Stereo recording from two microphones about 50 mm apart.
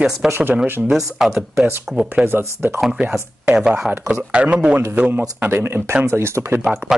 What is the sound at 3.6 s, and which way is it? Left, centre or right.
Speech, centre.